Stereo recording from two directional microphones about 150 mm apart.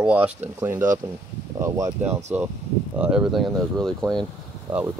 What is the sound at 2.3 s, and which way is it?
Speech, 10° right (ahead or behind).